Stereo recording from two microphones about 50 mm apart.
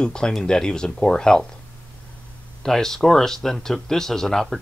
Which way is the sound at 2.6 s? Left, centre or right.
Centre.